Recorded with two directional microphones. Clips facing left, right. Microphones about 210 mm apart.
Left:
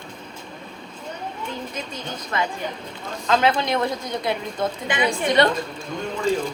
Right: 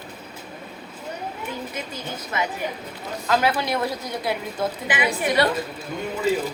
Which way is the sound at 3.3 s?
25° left (ahead or behind).